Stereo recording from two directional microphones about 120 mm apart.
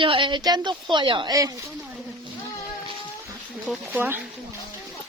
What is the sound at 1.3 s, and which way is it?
Speech, 30° right (ahead or behind).